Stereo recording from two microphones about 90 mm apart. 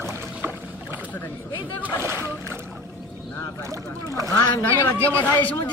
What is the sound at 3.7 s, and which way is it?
Speech, 40° right (ahead or behind).